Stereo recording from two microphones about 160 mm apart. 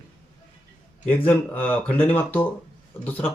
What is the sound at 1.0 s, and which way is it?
Speech, 10° left (ahead or behind).